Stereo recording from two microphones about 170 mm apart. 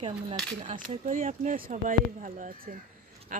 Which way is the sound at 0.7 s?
45° right (ahead or behind).